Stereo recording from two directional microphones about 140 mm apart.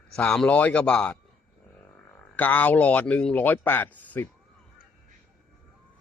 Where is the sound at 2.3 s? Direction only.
10° left (ahead or behind).